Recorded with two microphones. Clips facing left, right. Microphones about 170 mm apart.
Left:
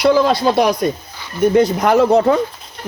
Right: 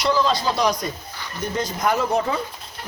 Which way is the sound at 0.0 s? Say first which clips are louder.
Left 8 dB; 60° left (ahead or behind).